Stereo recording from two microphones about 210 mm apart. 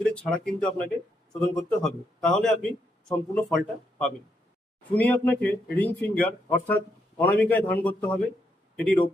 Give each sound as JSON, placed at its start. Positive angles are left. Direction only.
{"t": 0.0, "sound": "a man's voice", "side_deg": 5}